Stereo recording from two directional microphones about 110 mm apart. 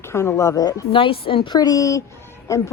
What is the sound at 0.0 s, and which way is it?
Speech, 25° left (ahead or behind).